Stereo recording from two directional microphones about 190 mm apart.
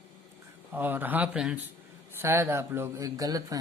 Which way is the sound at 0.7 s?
10° right (ahead or behind).